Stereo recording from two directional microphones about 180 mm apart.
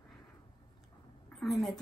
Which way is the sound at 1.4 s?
Centre (ahead or behind).